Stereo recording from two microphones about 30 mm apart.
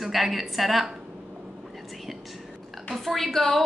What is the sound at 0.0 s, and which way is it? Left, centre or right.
Speech, centre.